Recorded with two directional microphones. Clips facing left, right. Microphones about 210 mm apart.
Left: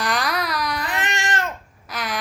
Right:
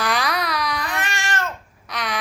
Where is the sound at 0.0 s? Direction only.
Centre (ahead or behind).